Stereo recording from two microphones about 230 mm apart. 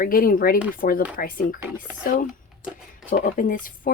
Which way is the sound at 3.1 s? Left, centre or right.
Left.